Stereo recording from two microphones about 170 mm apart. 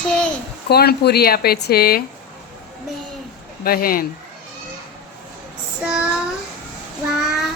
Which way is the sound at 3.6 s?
60° left (ahead or behind).